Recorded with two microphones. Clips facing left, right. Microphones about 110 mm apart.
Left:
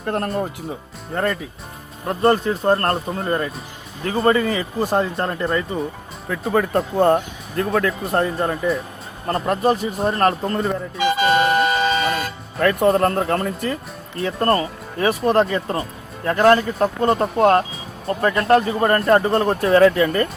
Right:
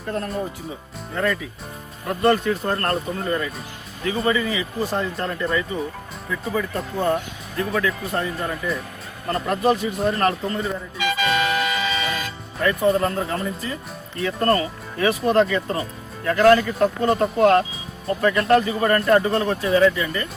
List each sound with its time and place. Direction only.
0.0 s speech: 60° left (ahead or behind)
1.1 s speech: 40° left (ahead or behind)
7.0 s speech: 55° left (ahead or behind)
7.7 s speech: 40° left (ahead or behind)
10.4 s speech: 50° left (ahead or behind)
11.1 s music: 45° left (ahead or behind); by 13.7 s 60° left (ahead or behind)
14.2 s speech: 35° left (ahead or behind)
15.5 s speech: 30° left (ahead or behind)
19.6 s speech: 60° left (ahead or behind)